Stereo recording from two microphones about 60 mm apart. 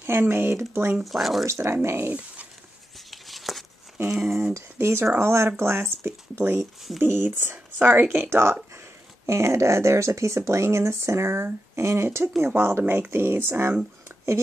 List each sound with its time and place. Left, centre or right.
0.0 s speech: right
1.0 s speech: centre
1.4 s speech: right
3.1 s a sound: centre
4.6 s speech: right